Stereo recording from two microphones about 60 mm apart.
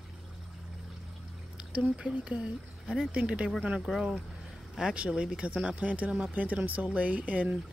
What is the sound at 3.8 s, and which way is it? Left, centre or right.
Speech, centre.